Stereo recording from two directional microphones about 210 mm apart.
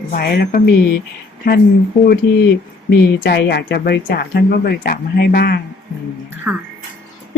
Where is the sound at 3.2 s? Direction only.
50° left (ahead or behind).